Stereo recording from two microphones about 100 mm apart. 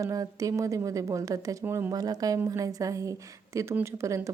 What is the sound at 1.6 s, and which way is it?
Speech, 20° right (ahead or behind).